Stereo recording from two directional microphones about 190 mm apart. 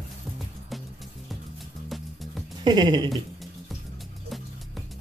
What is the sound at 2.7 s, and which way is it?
Speech, 20° right (ahead or behind).